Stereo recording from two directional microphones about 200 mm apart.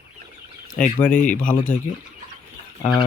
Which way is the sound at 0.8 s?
5° left (ahead or behind).